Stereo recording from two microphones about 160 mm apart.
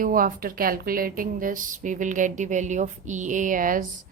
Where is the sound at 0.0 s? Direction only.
60° right (ahead or behind).